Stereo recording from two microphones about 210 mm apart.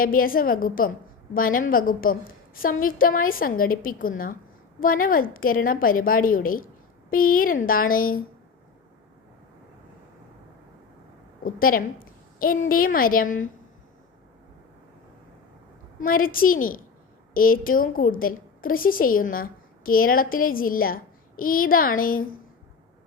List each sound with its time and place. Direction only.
0.0 s a woman's voice: 40° left (ahead or behind)
11.4 s a woman's voice: 45° left (ahead or behind)
16.0 s a woman's voice: 40° left (ahead or behind)